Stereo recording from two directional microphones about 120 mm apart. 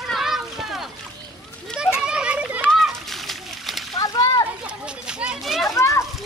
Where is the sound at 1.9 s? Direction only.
10° right (ahead or behind).